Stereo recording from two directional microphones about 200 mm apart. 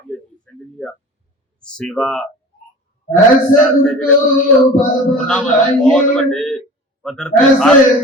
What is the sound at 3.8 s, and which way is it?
Speech, 5° left (ahead or behind).